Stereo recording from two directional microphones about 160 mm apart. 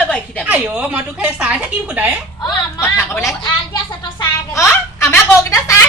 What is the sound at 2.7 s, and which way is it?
Speech, 15° left (ahead or behind).